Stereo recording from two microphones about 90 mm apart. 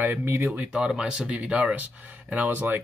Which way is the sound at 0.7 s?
5° right (ahead or behind).